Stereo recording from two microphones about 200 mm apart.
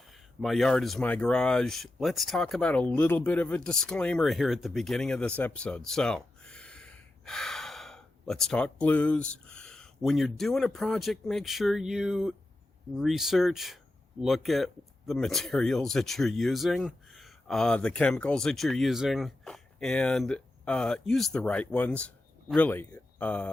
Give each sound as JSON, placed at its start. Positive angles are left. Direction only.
{"t": 0.4, "sound": "speech", "side_deg": 0}